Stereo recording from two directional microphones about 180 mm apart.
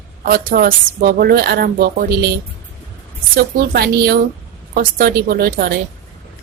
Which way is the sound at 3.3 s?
60° right (ahead or behind).